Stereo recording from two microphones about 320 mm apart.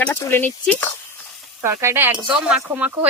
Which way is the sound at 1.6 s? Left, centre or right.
Centre.